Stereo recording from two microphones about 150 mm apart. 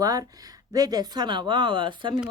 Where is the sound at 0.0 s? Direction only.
25° right (ahead or behind).